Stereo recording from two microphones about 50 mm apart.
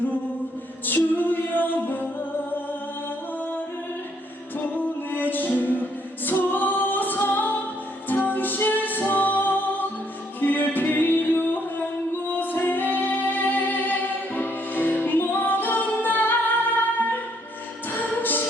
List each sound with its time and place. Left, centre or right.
0.9 s music: left
4.6 s music: left
5.8 s a capella: left
8.0 s music: left
18.2 s music: left